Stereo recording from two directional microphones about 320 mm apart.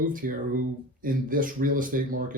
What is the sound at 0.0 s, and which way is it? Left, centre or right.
Speech, right.